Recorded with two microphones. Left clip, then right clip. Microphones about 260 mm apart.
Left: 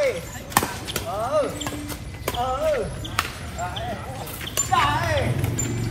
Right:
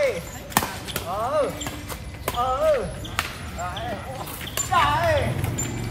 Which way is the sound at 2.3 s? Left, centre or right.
Centre.